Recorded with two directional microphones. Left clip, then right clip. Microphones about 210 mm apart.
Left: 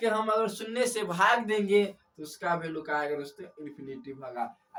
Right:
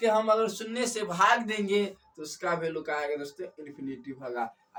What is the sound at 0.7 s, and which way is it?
Speech, 20° left (ahead or behind).